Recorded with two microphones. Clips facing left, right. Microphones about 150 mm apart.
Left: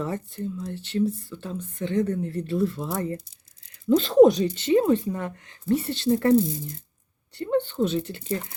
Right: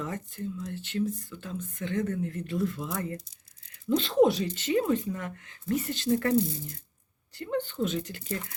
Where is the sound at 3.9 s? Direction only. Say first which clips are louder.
Left 7 dB; 40° left (ahead or behind).